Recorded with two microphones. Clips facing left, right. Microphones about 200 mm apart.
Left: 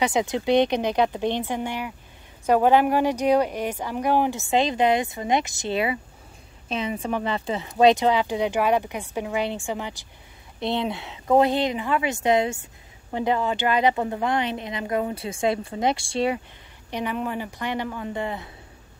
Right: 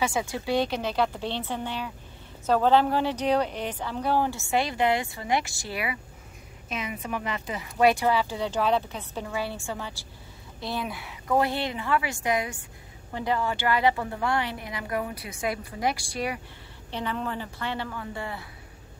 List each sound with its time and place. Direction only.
0.0 s a woman's voice: 20° left (ahead or behind)
16.9 s speech: 15° left (ahead or behind)